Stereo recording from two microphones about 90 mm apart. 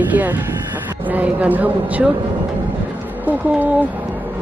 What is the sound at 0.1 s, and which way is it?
A man's voice, 20° right (ahead or behind).